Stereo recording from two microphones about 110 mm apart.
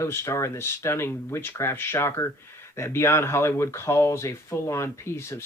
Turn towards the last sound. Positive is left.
turn(degrees=25)  # may be behind; listen again after turning